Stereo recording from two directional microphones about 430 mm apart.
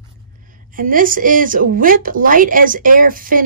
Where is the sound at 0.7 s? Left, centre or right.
Centre.